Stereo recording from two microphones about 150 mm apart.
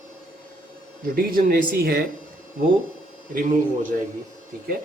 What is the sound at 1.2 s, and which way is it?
Speech, 85° right.